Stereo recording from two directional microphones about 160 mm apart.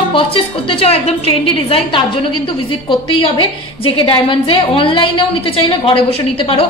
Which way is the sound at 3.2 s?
35° left (ahead or behind).